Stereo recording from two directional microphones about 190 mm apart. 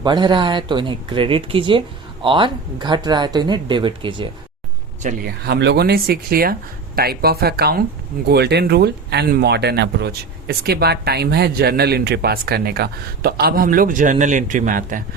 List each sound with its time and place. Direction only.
0.0 s speech: 25° right (ahead or behind)
5.0 s speech: 55° right (ahead or behind)